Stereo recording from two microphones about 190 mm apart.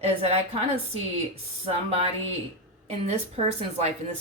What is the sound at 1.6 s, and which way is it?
Speech, 30° right (ahead or behind).